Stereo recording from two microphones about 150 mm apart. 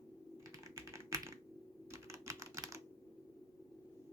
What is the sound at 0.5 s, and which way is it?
Typing, 20° right (ahead or behind).